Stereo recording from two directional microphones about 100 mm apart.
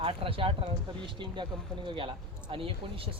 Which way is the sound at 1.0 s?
55° right (ahead or behind).